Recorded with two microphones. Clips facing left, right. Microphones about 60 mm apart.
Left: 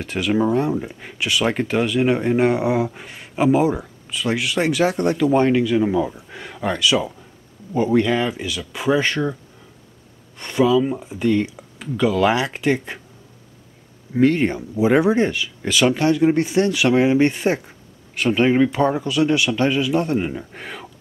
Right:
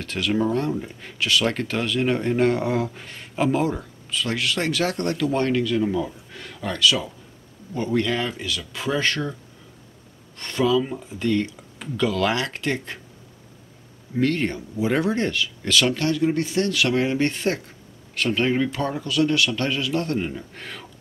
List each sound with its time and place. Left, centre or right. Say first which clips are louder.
0.0 s speech: left 3 dB; centre
14.1 s speech: left 6 dB; centre